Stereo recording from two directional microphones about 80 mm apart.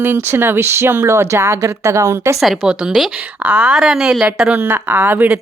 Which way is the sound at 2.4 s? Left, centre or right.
Centre.